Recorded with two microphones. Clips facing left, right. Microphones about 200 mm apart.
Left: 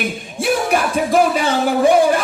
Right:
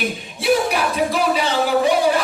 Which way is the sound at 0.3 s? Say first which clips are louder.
Left 1 dB; 50° left (ahead or behind).